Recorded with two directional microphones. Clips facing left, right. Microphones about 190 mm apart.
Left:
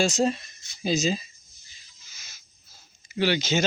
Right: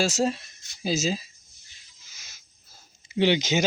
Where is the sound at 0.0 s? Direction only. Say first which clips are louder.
Left 1 dB; 5° right (ahead or behind).